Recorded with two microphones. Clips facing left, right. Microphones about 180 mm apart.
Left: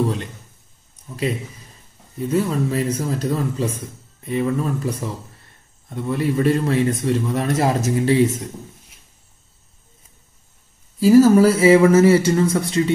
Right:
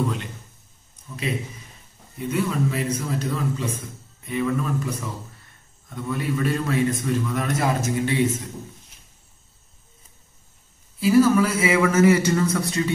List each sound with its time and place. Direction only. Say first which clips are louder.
0.0 s a man's voice: left 4 dB; 35° left (ahead or behind)
2.3 s a man's voice: left 4 dB; 35° left (ahead or behind)
11.0 s a man's voice: left 6 dB; 40° left (ahead or behind)